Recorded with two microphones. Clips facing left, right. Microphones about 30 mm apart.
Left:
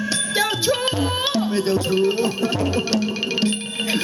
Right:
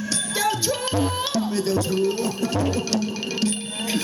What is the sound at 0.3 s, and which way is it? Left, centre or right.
Music, left.